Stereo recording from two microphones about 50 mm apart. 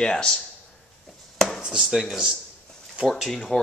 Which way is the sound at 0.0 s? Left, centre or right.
Centre.